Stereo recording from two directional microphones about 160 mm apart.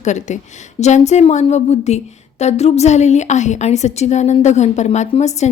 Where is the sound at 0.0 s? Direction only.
50° left (ahead or behind).